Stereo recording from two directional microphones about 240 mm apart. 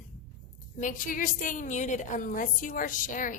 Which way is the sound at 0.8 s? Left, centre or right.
Left.